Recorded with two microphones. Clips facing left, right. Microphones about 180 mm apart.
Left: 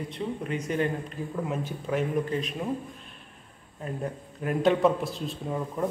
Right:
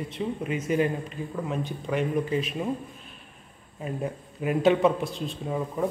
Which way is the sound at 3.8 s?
10° right (ahead or behind).